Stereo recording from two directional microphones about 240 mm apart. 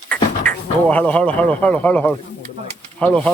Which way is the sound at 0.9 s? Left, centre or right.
Centre.